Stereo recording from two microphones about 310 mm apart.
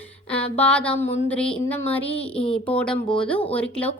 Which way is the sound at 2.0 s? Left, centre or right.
Centre.